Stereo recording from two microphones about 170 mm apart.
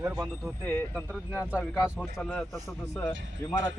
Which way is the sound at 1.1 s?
5° right (ahead or behind).